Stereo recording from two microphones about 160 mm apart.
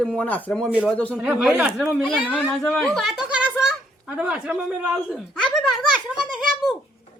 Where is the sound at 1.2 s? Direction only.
10° right (ahead or behind).